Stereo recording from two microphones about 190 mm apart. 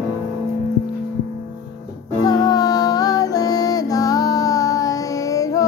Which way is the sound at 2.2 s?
20° left (ahead or behind).